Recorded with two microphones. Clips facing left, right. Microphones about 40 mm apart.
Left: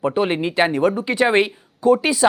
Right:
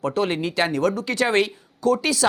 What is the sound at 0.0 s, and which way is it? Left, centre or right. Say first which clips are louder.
Speech: left 3 dB; left.